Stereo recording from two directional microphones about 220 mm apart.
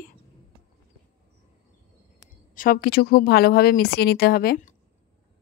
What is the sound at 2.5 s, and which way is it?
Speech, 40° left (ahead or behind).